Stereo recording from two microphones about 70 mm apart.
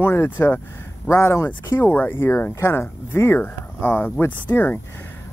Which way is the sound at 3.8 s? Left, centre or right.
Left.